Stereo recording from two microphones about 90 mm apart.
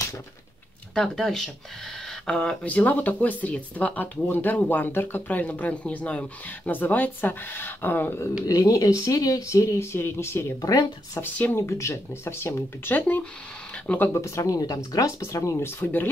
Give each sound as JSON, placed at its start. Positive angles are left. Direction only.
{"t": 0.9, "sound": "speech", "side_deg": 5}
{"t": 8.5, "sound": "speech", "side_deg": 40}
{"t": 10.6, "sound": "speech", "side_deg": 45}
{"t": 11.1, "sound": "speech", "side_deg": 20}
{"t": 14.2, "sound": "speech", "side_deg": 35}
{"t": 15.8, "sound": "speech", "side_deg": 20}